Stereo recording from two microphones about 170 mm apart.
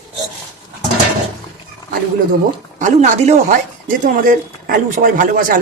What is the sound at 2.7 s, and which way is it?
A man's voice, 45° right (ahead or behind).